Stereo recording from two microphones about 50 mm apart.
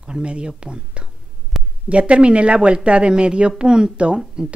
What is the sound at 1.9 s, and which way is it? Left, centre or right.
Speech, right.